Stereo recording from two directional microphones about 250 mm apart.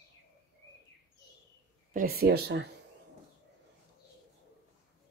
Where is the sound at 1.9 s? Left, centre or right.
Right.